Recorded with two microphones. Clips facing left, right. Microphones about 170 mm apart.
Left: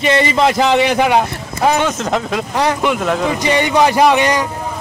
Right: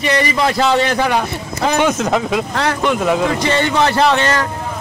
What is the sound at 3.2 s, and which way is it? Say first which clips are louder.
A man's voice: left 1 dB; 15° left (ahead or behind).